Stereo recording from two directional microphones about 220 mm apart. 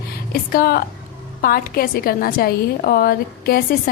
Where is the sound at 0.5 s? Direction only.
45° left (ahead or behind).